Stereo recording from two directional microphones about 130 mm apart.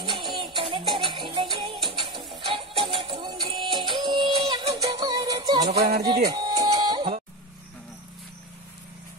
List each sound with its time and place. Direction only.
0.0 s music: 40° right (ahead or behind)
4.7 s music: 30° right (ahead or behind)
5.6 s music: 55° right (ahead or behind)
6.0 s music: 35° right (ahead or behind)